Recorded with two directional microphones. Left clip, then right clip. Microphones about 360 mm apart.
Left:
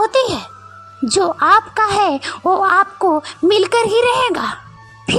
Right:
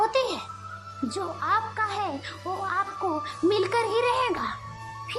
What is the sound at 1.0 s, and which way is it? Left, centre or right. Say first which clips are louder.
A woman's voice: left 15 dB; left.